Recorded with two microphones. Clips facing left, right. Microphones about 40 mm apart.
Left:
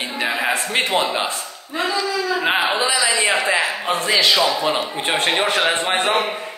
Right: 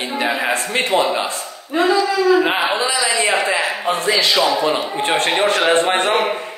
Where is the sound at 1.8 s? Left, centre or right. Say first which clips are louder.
Right 6 dB; right.